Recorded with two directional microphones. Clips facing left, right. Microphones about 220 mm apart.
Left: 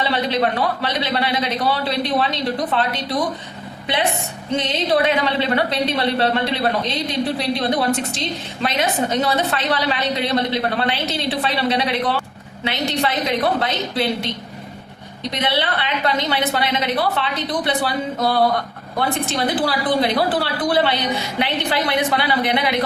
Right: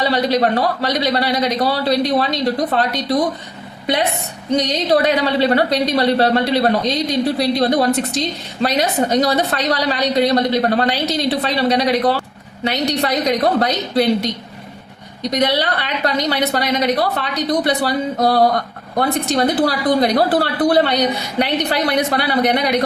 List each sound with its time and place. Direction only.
0.0 s a woman's voice: 40° right (ahead or behind)
4.5 s a woman's voice: 40° right (ahead or behind)
15.3 s a woman's voice: 40° right (ahead or behind)